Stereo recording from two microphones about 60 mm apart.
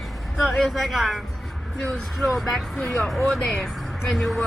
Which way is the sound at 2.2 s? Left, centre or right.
Centre.